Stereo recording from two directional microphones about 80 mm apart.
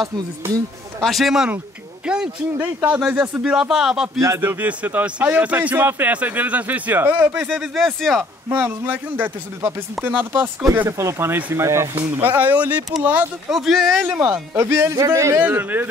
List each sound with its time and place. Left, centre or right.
1.0 s speech: centre
2.0 s a sound: centre
2.5 s speech: right
3.4 s speech: centre
4.4 s speech: right
7.6 s speech: centre
8.5 s speech: right
10.9 s speech: right
13.5 s speech: centre
14.3 s speech: right
15.4 s speech: right